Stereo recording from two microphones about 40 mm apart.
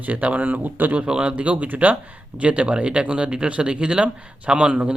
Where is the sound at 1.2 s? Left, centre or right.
Right.